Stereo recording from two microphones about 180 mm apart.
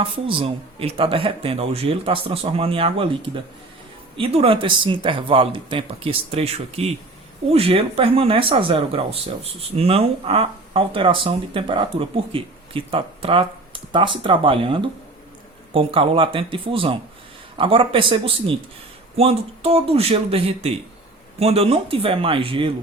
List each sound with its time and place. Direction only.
0.0 s speech: 30° right (ahead or behind)
4.2 s speech: 30° right (ahead or behind)